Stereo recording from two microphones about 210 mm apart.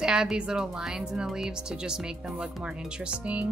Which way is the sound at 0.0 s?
5° right (ahead or behind).